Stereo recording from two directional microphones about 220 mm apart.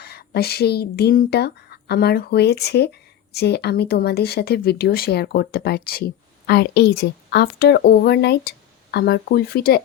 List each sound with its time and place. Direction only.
0.0 s speech: 45° left (ahead or behind)